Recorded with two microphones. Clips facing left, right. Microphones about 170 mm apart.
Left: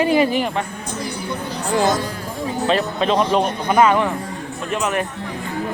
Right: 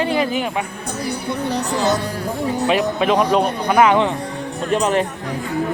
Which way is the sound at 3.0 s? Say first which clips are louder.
Right 1 dB; 10° right (ahead or behind).